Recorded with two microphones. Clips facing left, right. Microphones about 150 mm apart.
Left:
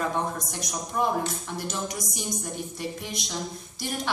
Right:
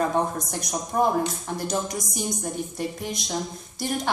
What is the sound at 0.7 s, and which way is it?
A woman's voice, 45° right (ahead or behind).